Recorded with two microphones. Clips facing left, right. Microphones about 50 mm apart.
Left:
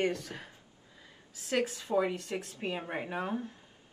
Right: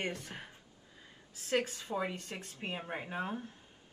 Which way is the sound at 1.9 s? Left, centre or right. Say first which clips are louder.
Left 7 dB; centre.